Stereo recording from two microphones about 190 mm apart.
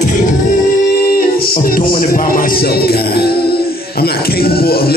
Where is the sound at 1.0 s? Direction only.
50° left (ahead or behind).